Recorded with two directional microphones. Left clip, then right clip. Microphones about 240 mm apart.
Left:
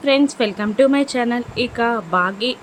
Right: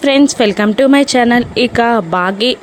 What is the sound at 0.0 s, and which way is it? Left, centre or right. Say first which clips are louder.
Speech: right 6 dB; right.